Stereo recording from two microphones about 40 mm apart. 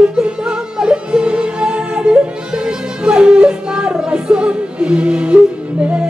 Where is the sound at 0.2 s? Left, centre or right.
Centre.